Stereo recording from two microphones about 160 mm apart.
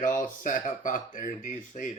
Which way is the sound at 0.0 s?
55° left (ahead or behind).